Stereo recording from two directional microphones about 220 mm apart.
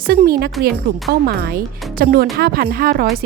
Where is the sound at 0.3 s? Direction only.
45° right (ahead or behind).